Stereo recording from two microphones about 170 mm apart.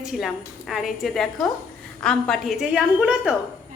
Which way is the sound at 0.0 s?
5° right (ahead or behind).